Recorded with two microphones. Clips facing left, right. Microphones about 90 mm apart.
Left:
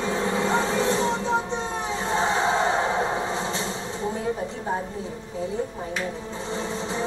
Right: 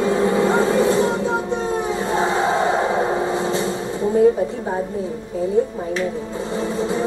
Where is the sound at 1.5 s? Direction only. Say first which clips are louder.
Right 7 dB; 10° right (ahead or behind).